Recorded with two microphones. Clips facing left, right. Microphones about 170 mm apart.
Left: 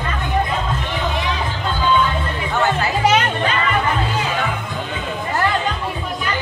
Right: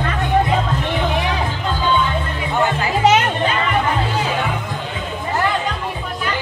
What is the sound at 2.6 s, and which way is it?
Music, 20° right (ahead or behind).